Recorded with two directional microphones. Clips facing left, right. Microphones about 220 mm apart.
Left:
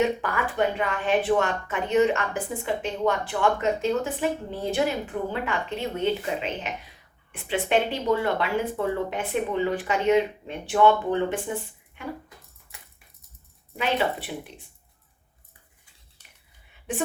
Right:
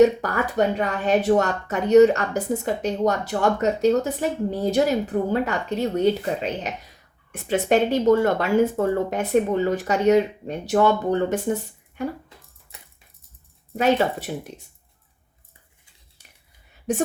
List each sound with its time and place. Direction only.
0.0 s a woman's voice: 40° right (ahead or behind)
13.7 s speech: 45° right (ahead or behind)
16.9 s a woman's voice: 40° right (ahead or behind)